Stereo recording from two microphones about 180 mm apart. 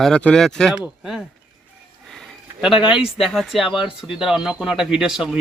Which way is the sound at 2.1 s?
Centre (ahead or behind).